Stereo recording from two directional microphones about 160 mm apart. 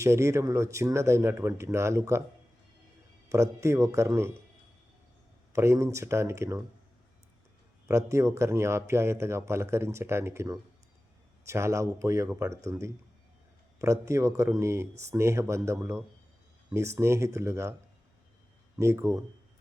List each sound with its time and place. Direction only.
0.0 s speech: 20° right (ahead or behind)
3.2 s speech: 20° right (ahead or behind)
5.5 s speech: 20° right (ahead or behind)
7.9 s speech: 20° right (ahead or behind)
13.7 s speech: 20° right (ahead or behind)
18.8 s speech: 15° right (ahead or behind)